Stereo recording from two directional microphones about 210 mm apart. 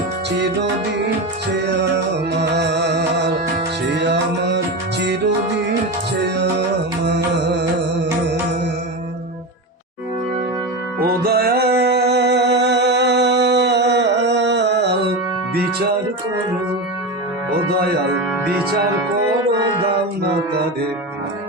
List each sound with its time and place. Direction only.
1.5 s music: 55° right (ahead or behind)
11.2 s music: 45° right (ahead or behind)